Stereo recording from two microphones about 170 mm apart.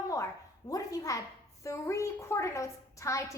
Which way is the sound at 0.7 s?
20° left (ahead or behind).